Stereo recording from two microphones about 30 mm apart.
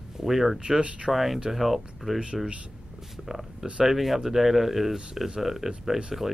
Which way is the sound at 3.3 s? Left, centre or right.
Centre.